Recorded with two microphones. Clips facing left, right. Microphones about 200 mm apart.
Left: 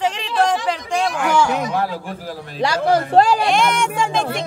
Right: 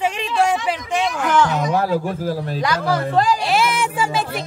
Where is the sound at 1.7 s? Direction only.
40° right (ahead or behind).